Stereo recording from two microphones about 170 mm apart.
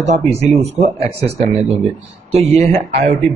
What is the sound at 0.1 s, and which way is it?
Speech, 40° right (ahead or behind).